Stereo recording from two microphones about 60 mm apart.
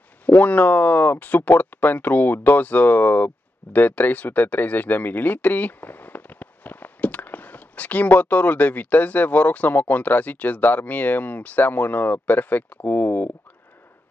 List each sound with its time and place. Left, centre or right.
0.3 s speech: left